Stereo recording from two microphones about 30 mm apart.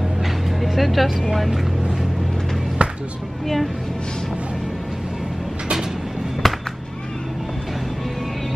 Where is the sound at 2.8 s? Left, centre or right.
Right.